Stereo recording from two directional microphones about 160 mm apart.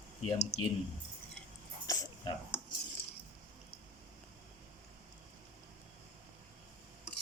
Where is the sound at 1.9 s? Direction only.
20° left (ahead or behind).